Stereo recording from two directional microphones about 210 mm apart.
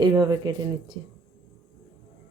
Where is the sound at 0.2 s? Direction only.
20° right (ahead or behind).